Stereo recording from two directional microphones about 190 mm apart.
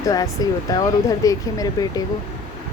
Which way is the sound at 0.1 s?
20° left (ahead or behind).